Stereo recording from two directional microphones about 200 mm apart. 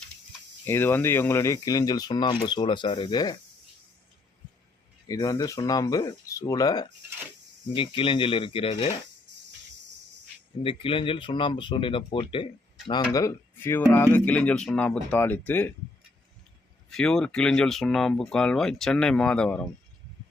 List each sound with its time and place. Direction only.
0.6 s speech: 10° left (ahead or behind)
5.0 s speech: 15° left (ahead or behind)
9.3 s cricket: 60° right (ahead or behind)
10.6 s speech: 25° left (ahead or behind); by 15.7 s 10° left (ahead or behind)
16.9 s speech: 5° left (ahead or behind)